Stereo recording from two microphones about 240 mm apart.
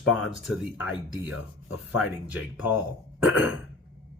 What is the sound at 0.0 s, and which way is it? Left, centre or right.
Speech, centre.